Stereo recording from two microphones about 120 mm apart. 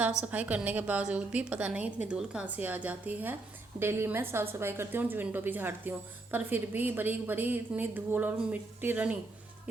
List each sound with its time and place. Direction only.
0.0 s a woman's voice: 10° right (ahead or behind)